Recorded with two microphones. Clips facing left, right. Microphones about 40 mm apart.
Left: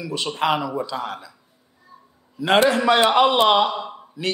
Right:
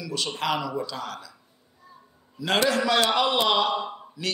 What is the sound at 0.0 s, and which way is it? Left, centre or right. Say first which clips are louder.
A man's voice: left 5 dB; left.